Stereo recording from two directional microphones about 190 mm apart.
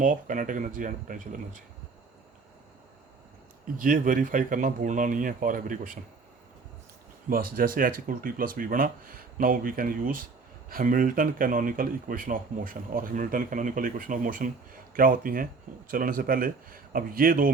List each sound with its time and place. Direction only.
0.0 s speech: 45° right (ahead or behind)
3.8 s speech: 45° right (ahead or behind)
7.3 s speech: 50° right (ahead or behind)